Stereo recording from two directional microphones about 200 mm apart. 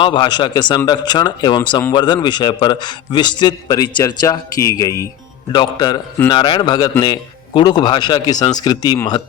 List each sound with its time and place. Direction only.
0.0 s a man's voice: 25° left (ahead or behind)